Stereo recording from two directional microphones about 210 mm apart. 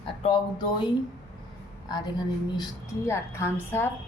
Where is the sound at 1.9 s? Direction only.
20° left (ahead or behind).